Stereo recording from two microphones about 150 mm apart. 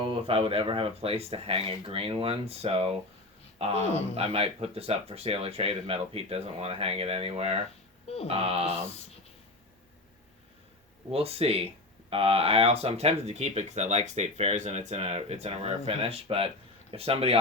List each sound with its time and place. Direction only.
0.0 s speech: 40° right (ahead or behind)
11.1 s speech: 40° right (ahead or behind)